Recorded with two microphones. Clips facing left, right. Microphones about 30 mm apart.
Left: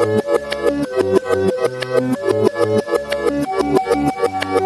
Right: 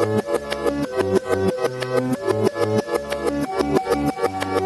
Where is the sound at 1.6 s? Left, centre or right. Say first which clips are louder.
Left 4 dB; left.